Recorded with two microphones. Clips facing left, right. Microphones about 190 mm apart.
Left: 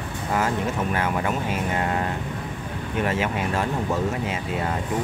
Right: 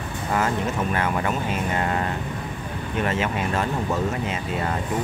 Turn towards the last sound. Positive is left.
turn(degrees=10)  # may be behind; listen again after turning